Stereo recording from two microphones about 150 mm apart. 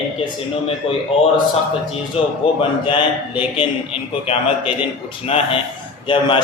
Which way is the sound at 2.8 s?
30° left (ahead or behind).